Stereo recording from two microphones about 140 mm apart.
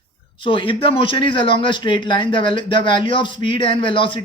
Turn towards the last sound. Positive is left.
turn(degrees=35)  # may be behind; listen again after turning